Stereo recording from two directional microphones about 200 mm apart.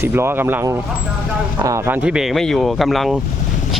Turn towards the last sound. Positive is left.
turn(degrees=0)  # may be behind; listen again after turning